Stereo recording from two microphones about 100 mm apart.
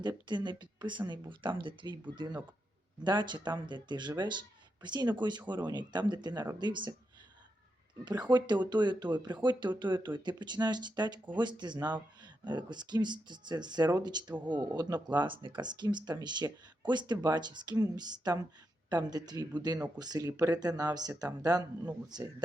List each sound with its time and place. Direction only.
0.0 s speech: 45° right (ahead or behind)
8.0 s speech: 45° right (ahead or behind)